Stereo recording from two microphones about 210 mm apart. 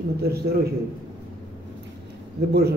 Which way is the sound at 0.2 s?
50° right (ahead or behind).